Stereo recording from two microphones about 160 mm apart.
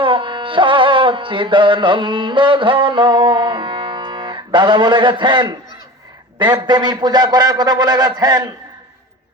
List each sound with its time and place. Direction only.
0.0 s carnatic music: 30° right (ahead or behind)
6.4 s a man's voice: 25° right (ahead or behind)